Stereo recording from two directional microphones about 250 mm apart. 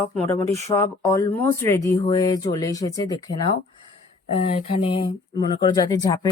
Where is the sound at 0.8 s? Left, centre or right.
Centre.